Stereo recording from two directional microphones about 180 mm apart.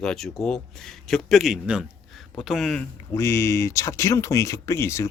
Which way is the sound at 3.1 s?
15° left (ahead or behind).